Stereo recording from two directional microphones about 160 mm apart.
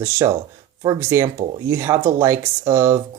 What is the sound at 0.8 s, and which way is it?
Speech, 20° right (ahead or behind).